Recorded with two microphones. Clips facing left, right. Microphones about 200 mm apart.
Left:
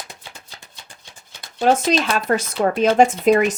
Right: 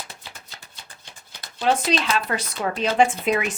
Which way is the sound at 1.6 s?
45° left (ahead or behind).